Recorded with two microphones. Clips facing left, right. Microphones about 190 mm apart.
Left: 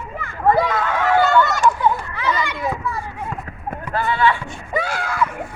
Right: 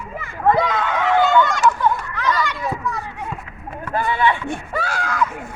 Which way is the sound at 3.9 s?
15° right (ahead or behind).